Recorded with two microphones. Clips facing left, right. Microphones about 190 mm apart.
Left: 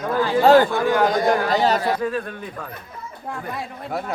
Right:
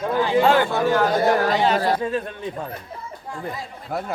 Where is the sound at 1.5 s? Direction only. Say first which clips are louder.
Left 1 dB; 40° left (ahead or behind).